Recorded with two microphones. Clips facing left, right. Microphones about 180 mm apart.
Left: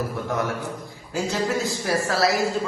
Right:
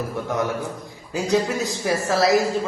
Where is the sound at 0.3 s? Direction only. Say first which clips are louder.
Right 4 dB; 20° right (ahead or behind).